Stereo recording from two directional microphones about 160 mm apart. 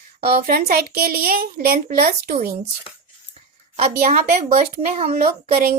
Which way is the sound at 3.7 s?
45° right (ahead or behind).